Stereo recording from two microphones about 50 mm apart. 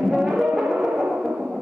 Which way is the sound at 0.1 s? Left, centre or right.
Centre.